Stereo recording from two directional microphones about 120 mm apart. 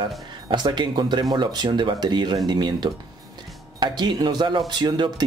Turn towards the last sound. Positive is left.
turn(degrees=-40)  # may be behind; listen again after turning